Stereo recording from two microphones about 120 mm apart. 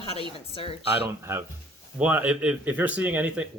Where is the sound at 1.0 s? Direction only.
20° right (ahead or behind).